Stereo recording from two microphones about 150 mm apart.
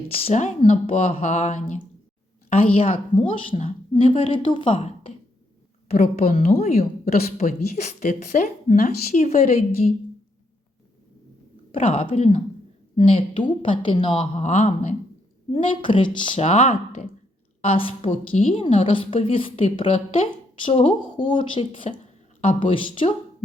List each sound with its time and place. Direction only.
0.2 s a woman's voice: 45° left (ahead or behind)
6.0 s a woman's voice: 75° left (ahead or behind)
7.3 s speech: 55° left (ahead or behind)
11.7 s a woman's voice: 40° left (ahead or behind)
15.4 s a woman's voice: 35° left (ahead or behind)
16.4 s a woman's voice: 45° left (ahead or behind)